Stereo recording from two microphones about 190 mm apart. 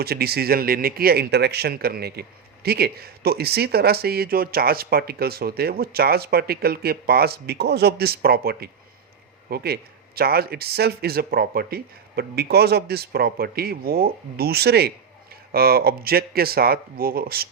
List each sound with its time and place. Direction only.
0.0 s speech: 55° right (ahead or behind)